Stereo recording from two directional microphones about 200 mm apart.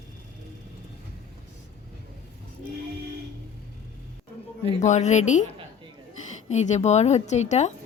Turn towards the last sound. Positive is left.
turn(degrees=35)  # may be behind; listen again after turning